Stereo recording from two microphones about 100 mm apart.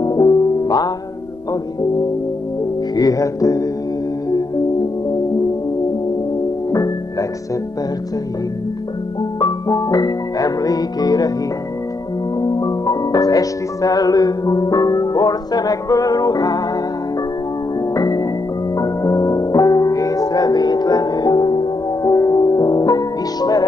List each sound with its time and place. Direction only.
0.0 s music: 40° left (ahead or behind)
3.0 s music: 35° left (ahead or behind)
6.7 s music: 35° left (ahead or behind)
9.4 s music: 40° left (ahead or behind)
12.4 s music: 45° left (ahead or behind)
17.9 s music: 35° left (ahead or behind)
22.0 s music: 35° left (ahead or behind)